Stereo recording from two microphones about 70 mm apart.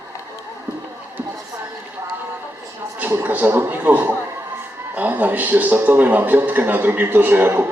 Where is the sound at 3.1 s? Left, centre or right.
Right.